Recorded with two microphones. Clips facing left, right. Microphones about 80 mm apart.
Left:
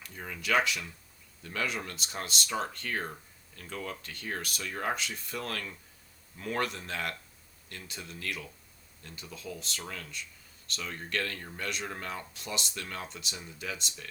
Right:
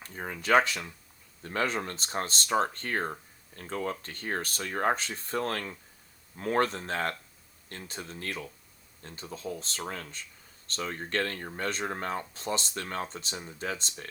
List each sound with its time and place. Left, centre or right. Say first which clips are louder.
0.0 s speech: right 3 dB; right